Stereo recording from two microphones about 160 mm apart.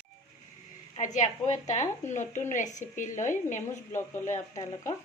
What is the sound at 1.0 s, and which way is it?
A woman's voice, 50° left (ahead or behind).